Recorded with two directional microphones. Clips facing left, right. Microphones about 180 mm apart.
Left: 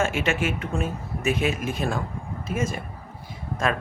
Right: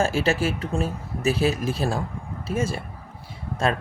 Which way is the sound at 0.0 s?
35° right (ahead or behind).